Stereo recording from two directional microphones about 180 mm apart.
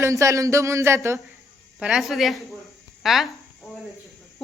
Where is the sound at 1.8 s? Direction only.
5° right (ahead or behind).